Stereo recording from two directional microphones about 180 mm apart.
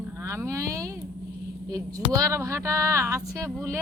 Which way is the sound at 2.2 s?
15° right (ahead or behind).